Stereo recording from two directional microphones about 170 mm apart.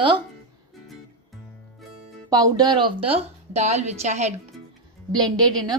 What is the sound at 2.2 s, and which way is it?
A woman's voice, 20° right (ahead or behind).